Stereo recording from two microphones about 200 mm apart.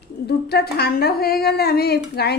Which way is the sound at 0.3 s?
55° left (ahead or behind).